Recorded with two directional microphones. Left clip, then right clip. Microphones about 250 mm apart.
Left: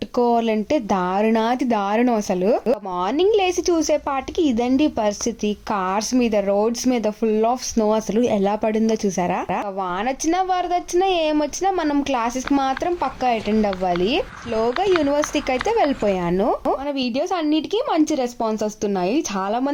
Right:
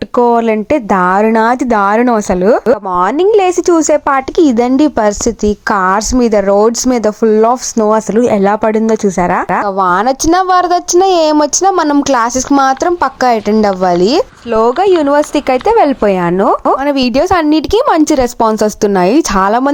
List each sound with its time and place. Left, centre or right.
0.2 s a woman's voice: centre
9.7 s a woman's voice: right; by 16.7 s centre
16.8 s a woman's voice: right